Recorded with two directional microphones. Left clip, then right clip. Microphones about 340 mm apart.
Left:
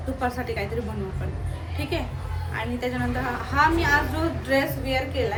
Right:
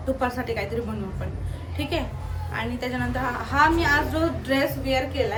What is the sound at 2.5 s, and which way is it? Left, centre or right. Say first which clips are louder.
A woman's voice: even; centre.